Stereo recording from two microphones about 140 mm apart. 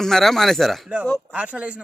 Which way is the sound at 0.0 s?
5° left (ahead or behind).